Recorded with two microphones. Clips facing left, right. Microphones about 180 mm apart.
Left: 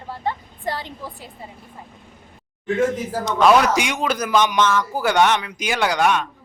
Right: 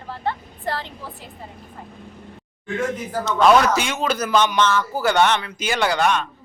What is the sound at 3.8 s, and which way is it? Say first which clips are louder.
A woman's voice: left 1 dB; 15° left (ahead or behind).